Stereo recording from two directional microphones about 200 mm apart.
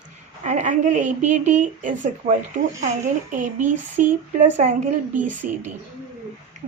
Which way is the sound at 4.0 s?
40° right (ahead or behind).